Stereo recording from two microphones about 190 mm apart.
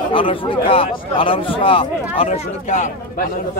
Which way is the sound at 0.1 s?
25° left (ahead or behind).